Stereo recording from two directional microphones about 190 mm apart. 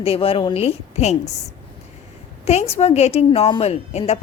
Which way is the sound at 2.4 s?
35° left (ahead or behind).